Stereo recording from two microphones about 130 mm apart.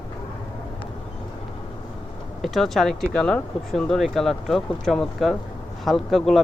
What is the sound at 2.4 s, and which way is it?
Speech, centre (ahead or behind).